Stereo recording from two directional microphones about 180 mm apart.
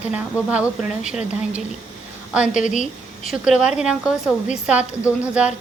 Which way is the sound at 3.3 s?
5° right (ahead or behind).